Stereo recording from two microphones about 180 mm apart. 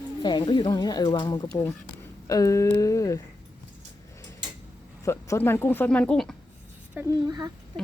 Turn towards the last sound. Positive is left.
turn(degrees=-20)  # may be behind; listen again after turning